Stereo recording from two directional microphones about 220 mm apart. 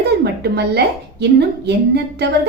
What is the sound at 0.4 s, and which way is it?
A woman's voice, 50° right (ahead or behind).